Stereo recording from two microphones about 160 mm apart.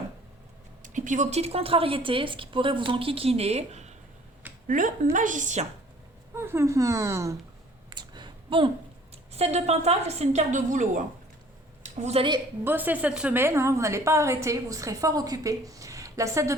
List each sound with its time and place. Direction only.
0.8 s a woman's voice: 50° right (ahead or behind)
6.3 s a woman's voice: 15° right (ahead or behind)
7.9 s a sound: 30° right (ahead or behind)
9.3 s a woman's voice: 40° right (ahead or behind)
11.8 s a sound: 45° right (ahead or behind)
12.6 s a woman's voice: 10° right (ahead or behind)